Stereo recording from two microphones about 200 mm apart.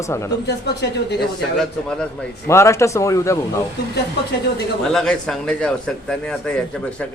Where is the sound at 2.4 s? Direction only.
15° left (ahead or behind).